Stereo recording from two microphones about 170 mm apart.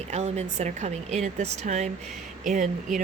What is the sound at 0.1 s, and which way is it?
A woman's voice, 40° right (ahead or behind).